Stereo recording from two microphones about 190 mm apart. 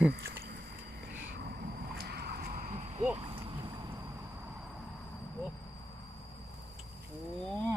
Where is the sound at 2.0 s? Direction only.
55° right (ahead or behind).